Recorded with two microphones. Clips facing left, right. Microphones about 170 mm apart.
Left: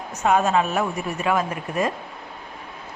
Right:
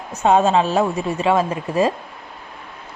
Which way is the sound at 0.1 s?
30° right (ahead or behind).